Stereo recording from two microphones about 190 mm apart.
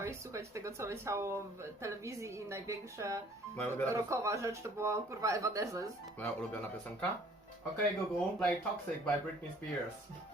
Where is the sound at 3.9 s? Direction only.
15° right (ahead or behind).